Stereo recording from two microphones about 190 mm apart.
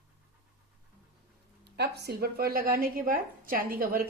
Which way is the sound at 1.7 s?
60° right (ahead or behind).